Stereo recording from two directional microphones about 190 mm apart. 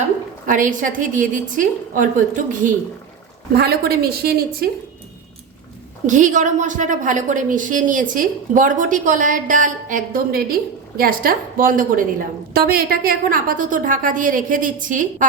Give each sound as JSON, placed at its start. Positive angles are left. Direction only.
{"t": 0.4, "sound": "a woman's voice", "side_deg": -45}
{"t": 3.6, "sound": "a woman's voice", "side_deg": -55}
{"t": 6.1, "sound": "a woman's voice", "side_deg": -40}